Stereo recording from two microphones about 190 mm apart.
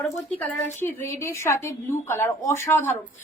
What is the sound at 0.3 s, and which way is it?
A woman's voice, 10° left (ahead or behind).